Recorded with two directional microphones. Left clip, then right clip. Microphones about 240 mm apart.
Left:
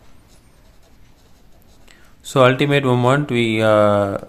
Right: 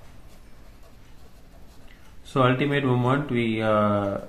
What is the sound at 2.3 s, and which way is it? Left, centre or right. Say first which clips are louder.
Speech: left 8 dB; left.